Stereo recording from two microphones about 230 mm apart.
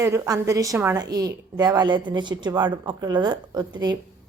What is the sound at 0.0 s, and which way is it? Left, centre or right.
A woman's voice, centre.